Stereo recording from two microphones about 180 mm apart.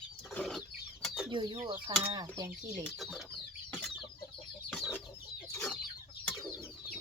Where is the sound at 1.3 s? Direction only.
25° right (ahead or behind).